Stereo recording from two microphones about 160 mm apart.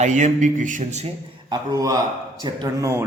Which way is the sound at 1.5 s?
20° right (ahead or behind).